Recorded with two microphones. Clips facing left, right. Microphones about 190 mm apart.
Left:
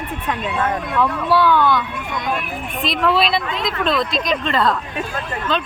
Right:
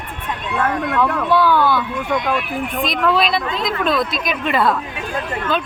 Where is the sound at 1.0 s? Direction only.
Centre (ahead or behind).